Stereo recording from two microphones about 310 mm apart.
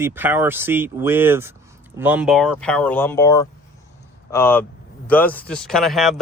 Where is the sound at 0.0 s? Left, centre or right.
Centre.